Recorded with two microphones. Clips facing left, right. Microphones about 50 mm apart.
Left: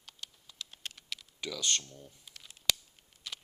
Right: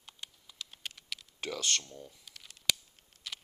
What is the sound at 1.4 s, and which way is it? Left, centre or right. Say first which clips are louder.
Speech: right 1 dB; right.